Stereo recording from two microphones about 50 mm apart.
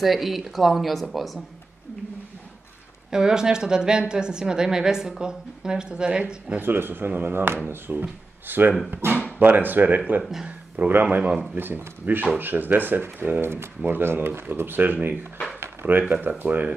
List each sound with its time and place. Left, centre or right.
0.0 s speech: centre
3.1 s a woman's voice: centre
6.5 s speech: right